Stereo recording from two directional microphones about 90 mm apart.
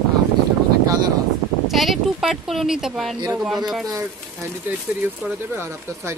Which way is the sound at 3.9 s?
35° right (ahead or behind).